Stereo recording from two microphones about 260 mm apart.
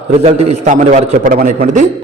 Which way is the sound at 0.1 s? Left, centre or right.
Right.